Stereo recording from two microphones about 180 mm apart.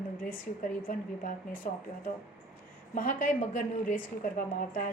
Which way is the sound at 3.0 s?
50° left (ahead or behind).